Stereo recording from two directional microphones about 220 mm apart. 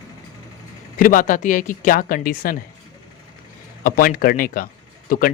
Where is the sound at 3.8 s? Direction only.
40° left (ahead or behind).